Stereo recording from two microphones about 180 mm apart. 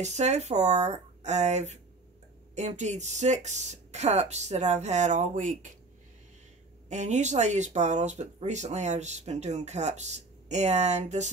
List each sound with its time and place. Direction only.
0.0 s speech: 40° right (ahead or behind)
6.9 s speech: 40° right (ahead or behind)